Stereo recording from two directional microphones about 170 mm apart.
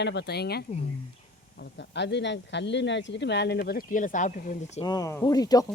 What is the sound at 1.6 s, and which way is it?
Speech, 90° left.